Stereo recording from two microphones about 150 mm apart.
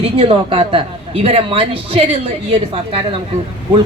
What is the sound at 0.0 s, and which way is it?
A man's voice, 40° right (ahead or behind).